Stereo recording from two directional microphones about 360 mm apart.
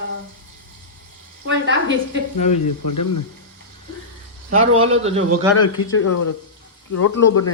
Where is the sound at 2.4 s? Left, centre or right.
Left.